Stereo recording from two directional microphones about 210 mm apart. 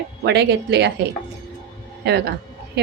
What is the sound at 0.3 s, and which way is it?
Speech, 55° right (ahead or behind).